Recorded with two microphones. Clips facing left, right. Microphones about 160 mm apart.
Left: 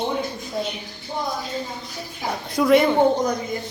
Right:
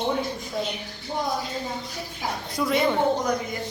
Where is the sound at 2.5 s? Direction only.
70° left (ahead or behind).